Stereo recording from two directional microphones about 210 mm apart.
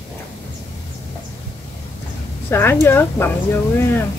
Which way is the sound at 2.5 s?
10° left (ahead or behind).